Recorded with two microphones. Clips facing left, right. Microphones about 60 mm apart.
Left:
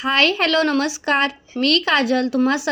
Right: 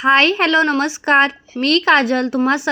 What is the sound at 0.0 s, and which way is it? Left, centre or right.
A woman's voice, right.